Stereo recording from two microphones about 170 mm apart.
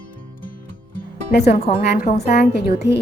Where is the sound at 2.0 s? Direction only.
55° left (ahead or behind).